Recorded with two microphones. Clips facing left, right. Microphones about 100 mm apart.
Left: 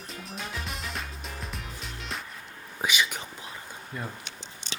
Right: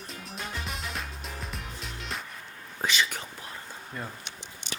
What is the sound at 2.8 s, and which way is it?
Whispering, 15° left (ahead or behind).